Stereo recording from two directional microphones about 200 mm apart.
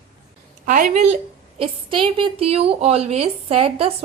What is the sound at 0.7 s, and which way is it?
Speech, 40° right (ahead or behind).